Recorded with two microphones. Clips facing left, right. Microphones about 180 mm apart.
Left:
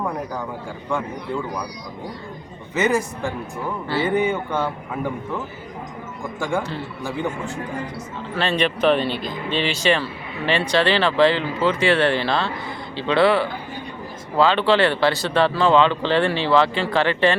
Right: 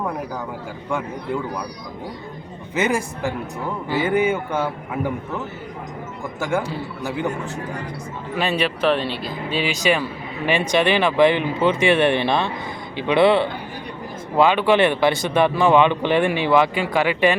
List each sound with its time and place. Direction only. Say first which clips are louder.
0.9 s speech: right 1 dB; 10° right (ahead or behind)
2.7 s speech: left 1 dB; 10° right (ahead or behind)
6.4 s speech: right 1 dB; 5° right (ahead or behind)
8.4 s speech: left 1 dB; 5° right (ahead or behind)